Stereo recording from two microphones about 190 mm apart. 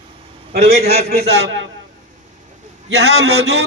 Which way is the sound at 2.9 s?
60° right (ahead or behind).